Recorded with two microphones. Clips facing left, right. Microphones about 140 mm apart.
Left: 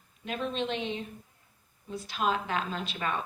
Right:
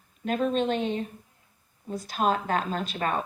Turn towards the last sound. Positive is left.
turn(degrees=-45)  # may be behind; listen again after turning